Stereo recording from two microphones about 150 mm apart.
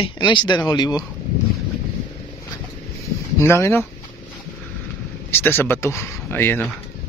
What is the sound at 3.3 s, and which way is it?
Speech, 20° left (ahead or behind).